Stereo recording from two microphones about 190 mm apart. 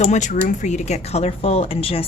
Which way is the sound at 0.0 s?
40° left (ahead or behind).